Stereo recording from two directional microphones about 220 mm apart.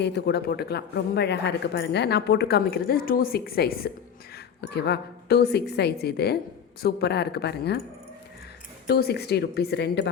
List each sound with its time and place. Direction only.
0.0 s speech: 50° left (ahead or behind)
8.9 s speech: 45° left (ahead or behind)